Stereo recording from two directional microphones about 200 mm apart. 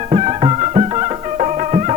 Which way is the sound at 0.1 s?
30° right (ahead or behind).